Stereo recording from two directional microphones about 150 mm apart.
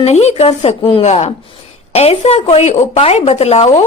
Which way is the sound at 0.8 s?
35° left (ahead or behind).